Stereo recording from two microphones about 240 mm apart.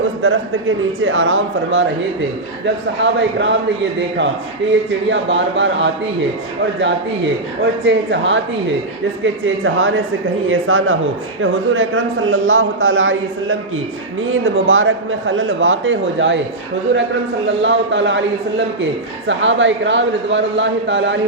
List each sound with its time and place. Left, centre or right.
0.2 s a man's voice: right
5.0 s speech: right
7.9 s a man's voice: right
17.6 s speech: right
19.3 s speech: right